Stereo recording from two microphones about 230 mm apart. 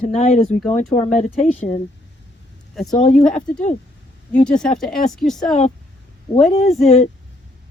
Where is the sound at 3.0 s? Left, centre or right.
Left.